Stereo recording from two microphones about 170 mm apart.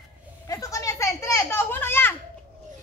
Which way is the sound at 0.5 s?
20° left (ahead or behind).